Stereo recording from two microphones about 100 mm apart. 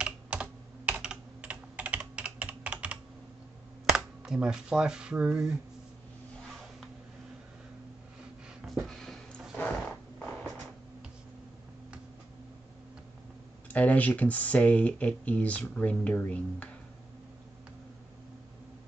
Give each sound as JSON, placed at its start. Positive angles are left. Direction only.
{"t": 0.0, "sound": "computer keyboard", "side_deg": -10}
{"t": 3.9, "sound": "speech", "side_deg": -10}
{"t": 8.6, "sound": "a sound", "side_deg": 0}
{"t": 9.6, "sound": "mechanisms", "side_deg": 15}
{"t": 13.7, "sound": "speech", "side_deg": 15}